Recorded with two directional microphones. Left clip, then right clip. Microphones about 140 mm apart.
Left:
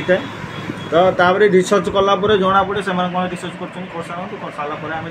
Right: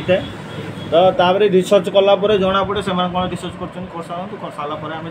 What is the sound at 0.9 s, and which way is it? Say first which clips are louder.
Speech: even; 40° left (ahead or behind).